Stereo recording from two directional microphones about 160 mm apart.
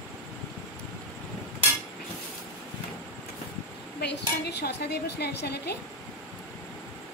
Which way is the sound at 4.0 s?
90° left.